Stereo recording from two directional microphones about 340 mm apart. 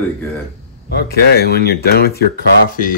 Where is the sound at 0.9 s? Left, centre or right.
Left.